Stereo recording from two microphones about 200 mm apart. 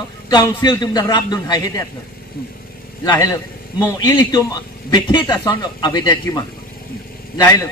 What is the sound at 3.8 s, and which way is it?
A man's voice, 15° left (ahead or behind).